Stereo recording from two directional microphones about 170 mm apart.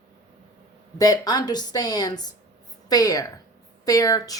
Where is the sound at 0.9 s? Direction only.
20° left (ahead or behind).